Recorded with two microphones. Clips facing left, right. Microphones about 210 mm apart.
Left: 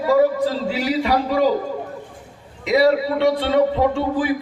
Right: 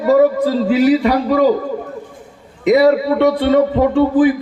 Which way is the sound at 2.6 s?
50° right (ahead or behind).